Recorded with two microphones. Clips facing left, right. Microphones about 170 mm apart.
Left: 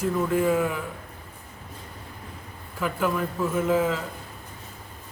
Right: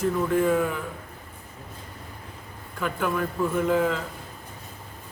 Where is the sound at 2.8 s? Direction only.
Centre (ahead or behind).